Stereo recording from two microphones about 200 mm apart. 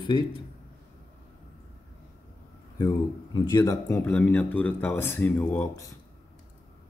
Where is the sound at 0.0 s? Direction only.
25° left (ahead or behind).